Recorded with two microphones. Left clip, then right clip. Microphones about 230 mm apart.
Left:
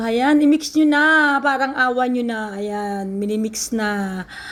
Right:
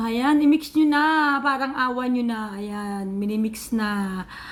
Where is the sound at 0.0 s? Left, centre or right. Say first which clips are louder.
Left 4 dB; centre.